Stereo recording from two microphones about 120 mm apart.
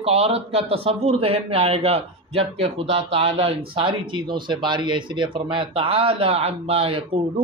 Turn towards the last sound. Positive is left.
turn(degrees=-55)  # may be behind; listen again after turning